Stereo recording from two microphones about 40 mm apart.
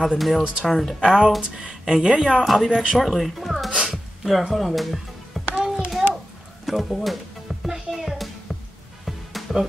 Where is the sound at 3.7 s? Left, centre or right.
Centre.